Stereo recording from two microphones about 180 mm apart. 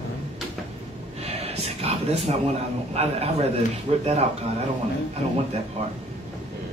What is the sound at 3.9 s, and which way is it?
Speech, 35° right (ahead or behind).